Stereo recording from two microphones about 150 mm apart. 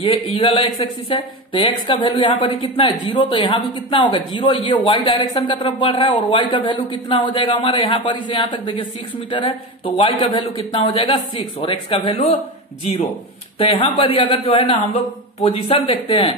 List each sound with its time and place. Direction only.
0.0 s speech: 35° left (ahead or behind)
9.9 s speech: 35° left (ahead or behind)
13.6 s speech: 35° left (ahead or behind)